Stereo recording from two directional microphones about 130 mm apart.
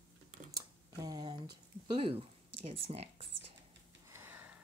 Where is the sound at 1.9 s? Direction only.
45° right (ahead or behind).